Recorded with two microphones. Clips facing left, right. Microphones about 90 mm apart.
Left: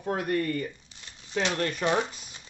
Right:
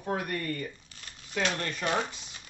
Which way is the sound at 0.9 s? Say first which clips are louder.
Left 4 dB; 20° left (ahead or behind).